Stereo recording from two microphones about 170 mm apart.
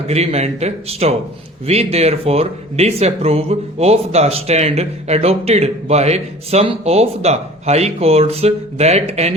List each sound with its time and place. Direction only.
0.1 s speech: 40° right (ahead or behind)